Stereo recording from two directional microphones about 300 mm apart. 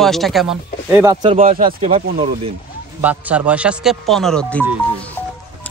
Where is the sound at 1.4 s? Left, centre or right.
Right.